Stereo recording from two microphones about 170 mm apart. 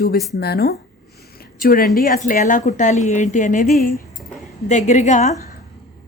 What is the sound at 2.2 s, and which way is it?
Speech, 50° left (ahead or behind).